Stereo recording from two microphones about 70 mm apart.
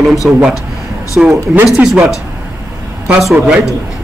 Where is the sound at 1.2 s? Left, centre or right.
Centre.